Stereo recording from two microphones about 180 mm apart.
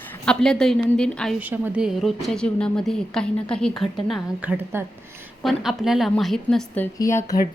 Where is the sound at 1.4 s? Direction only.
10° right (ahead or behind).